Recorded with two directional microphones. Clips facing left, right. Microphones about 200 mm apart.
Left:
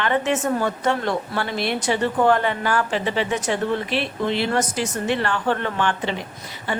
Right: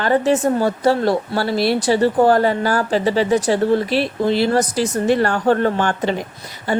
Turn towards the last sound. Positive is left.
turn(degrees=-40)  # may be behind; listen again after turning